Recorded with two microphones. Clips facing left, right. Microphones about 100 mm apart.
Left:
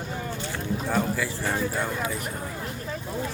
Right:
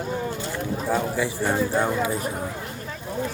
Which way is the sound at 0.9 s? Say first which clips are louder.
Right 3 dB; 20° right (ahead or behind).